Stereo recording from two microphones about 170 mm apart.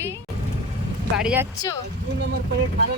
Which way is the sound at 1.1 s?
5° right (ahead or behind).